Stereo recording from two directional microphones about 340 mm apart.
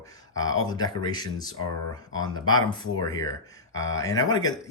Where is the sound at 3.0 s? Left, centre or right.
Centre.